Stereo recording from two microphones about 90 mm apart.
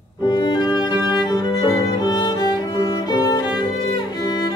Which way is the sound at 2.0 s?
55° left (ahead or behind).